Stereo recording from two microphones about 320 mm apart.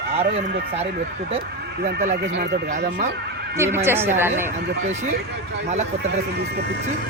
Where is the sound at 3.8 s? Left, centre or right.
Centre.